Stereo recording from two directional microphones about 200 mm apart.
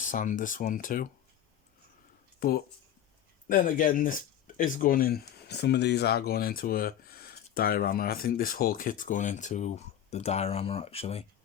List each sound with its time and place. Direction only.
0.0 s speech: 40° left (ahead or behind)
3.5 s speech: 45° left (ahead or behind)
5.5 s speech: 55° left (ahead or behind); by 11.3 s 30° left (ahead or behind)